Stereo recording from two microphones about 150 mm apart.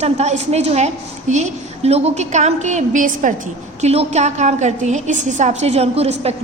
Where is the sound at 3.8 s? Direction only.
45° right (ahead or behind).